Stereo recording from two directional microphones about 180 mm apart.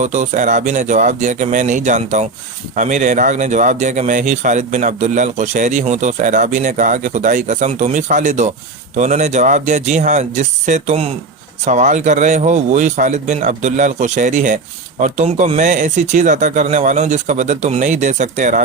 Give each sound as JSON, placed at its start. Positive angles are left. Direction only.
{"t": 0.0, "sound": "speech", "side_deg": -40}